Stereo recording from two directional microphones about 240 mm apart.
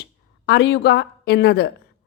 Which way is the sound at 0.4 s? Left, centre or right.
Left.